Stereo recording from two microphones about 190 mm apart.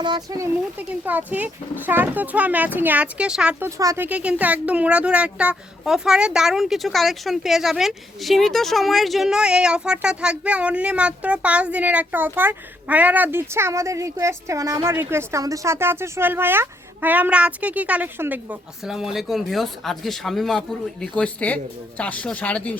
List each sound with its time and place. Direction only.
0.0 s speech: 20° right (ahead or behind)
0.8 s speech: 10° right (ahead or behind); by 22.8 s 5° left (ahead or behind)